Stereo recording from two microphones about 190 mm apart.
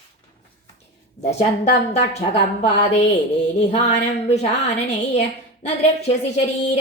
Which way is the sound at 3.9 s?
35° left (ahead or behind).